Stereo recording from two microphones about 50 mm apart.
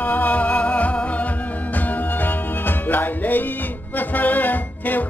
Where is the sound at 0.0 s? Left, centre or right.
Left.